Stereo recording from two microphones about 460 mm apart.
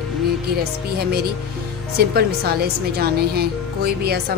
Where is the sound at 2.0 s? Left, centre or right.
Right.